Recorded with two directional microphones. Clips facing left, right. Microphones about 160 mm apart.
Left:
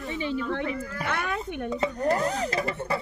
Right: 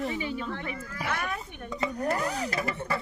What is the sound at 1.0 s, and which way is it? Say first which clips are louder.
Speech: left 2 dB; 65° left (ahead or behind).